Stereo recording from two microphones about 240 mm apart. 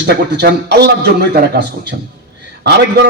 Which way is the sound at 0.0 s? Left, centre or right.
Right.